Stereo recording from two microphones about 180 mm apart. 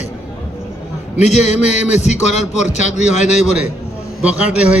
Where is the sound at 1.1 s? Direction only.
40° left (ahead or behind).